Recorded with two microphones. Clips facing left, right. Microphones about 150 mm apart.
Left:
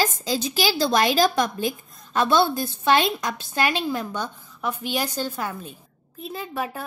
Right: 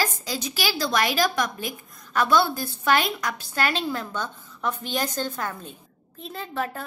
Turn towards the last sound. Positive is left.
turn(degrees=10)  # may be behind; listen again after turning